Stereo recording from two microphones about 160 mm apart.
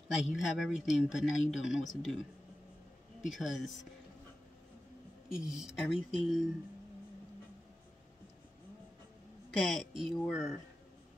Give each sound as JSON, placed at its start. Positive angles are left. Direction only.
{"t": 0.3, "sound": "speech", "side_deg": -5}
{"t": 3.3, "sound": "speech", "side_deg": 0}
{"t": 5.3, "sound": "speech", "side_deg": -5}
{"t": 9.6, "sound": "speech", "side_deg": 0}